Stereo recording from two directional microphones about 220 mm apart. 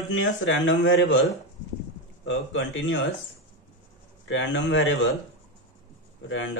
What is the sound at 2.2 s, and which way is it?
Speech, 60° left (ahead or behind).